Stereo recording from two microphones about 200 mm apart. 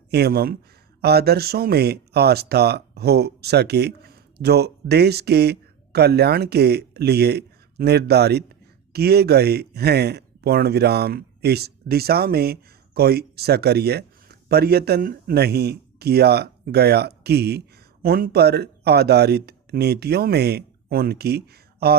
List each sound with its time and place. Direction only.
0.1 s speech: 50° right (ahead or behind)